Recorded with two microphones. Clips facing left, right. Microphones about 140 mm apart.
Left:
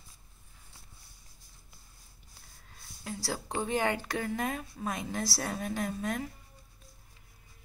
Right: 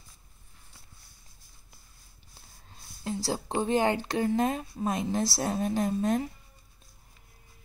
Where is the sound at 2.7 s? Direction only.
25° right (ahead or behind).